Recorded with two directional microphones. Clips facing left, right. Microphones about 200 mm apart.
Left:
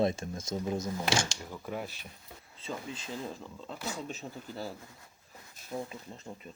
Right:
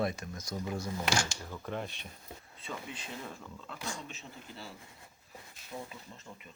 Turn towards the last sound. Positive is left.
turn(degrees=30)  # may be behind; listen again after turning